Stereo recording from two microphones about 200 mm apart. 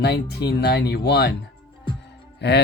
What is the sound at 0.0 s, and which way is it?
Speech, 55° left (ahead or behind).